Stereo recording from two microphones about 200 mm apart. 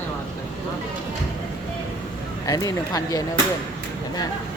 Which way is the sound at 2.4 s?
15° left (ahead or behind).